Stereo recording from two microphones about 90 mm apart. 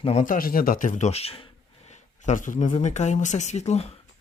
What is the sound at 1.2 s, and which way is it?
Speech, 90° left.